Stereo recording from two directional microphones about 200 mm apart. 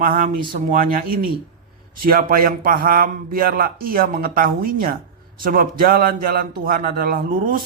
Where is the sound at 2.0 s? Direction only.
45° right (ahead or behind).